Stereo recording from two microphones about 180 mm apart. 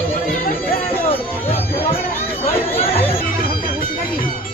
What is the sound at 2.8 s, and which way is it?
Speech, 30° left (ahead or behind).